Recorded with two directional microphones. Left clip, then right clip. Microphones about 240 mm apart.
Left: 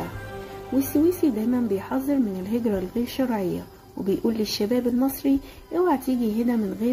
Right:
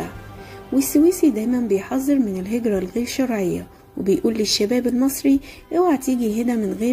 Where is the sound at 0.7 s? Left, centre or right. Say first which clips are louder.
Right 5 dB; centre.